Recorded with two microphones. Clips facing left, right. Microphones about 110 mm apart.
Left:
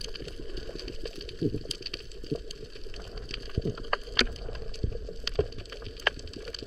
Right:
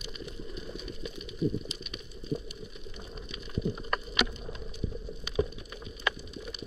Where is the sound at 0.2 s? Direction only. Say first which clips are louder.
Even; 5° right (ahead or behind).